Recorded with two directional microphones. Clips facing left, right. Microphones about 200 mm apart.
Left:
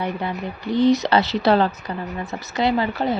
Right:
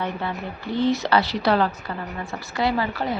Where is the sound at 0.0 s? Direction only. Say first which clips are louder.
Left 2 dB; 15° left (ahead or behind).